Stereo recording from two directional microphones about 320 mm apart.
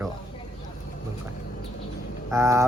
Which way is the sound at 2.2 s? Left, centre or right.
Centre.